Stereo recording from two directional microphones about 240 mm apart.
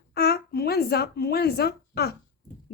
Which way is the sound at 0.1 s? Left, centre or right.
Left.